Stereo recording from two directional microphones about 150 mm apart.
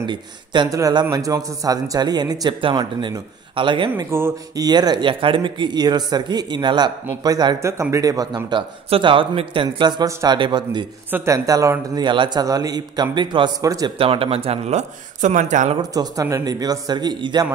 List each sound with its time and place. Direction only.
0.0 s a man's voice: 30° right (ahead or behind)
4.0 s a man's voice: 20° right (ahead or behind)
11.1 s a man's voice: 15° right (ahead or behind)
13.9 s speech: 35° right (ahead or behind); by 15.8 s 55° right (ahead or behind)
15.8 s a man's voice: 25° right (ahead or behind)